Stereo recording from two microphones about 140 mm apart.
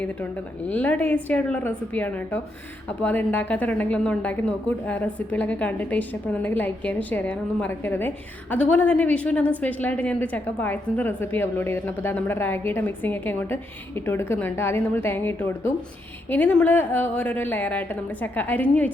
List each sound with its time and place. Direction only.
0.7 s a woman's voice: 10° left (ahead or behind)